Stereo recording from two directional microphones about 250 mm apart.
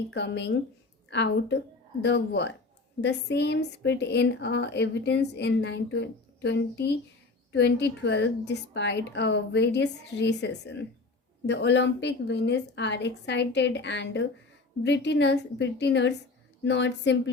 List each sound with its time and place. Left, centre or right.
0.1 s a woman's voice: left